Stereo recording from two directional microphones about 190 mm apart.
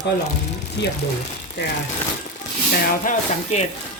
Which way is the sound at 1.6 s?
65° left (ahead or behind).